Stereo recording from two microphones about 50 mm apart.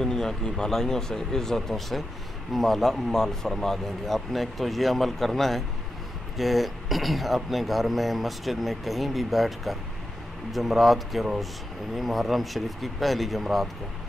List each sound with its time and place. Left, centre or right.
0.0 s speech: centre